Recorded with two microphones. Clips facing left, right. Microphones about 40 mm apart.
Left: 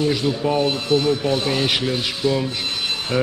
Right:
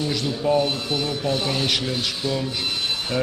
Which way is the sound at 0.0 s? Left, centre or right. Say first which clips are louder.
Left 4 dB; centre.